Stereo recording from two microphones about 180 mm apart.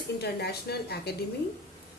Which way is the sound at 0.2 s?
65° left (ahead or behind).